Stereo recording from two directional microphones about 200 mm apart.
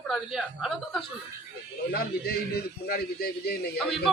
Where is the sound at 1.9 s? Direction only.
50° left (ahead or behind).